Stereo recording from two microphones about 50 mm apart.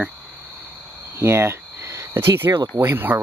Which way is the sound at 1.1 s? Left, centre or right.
Right.